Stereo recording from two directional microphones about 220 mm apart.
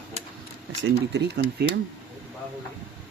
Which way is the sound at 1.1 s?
50° right (ahead or behind).